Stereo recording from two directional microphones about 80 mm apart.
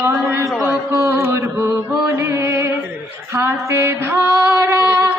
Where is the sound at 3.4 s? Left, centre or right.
Right.